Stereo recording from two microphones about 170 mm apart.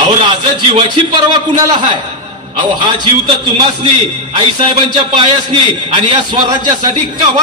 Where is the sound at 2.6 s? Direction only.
25° right (ahead or behind).